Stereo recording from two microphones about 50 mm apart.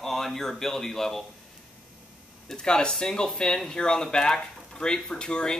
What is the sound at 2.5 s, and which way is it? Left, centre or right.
Speech, centre.